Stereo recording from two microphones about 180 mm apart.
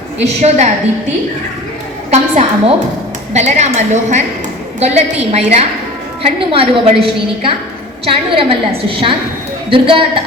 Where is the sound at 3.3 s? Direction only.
40° right (ahead or behind).